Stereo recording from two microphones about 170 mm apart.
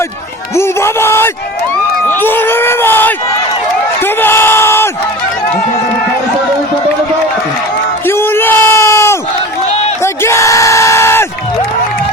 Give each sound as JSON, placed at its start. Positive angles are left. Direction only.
{"t": 0.5, "sound": "speech", "side_deg": 15}
{"t": 8.0, "sound": "bellow", "side_deg": 15}
{"t": 10.0, "sound": "a sound", "side_deg": 15}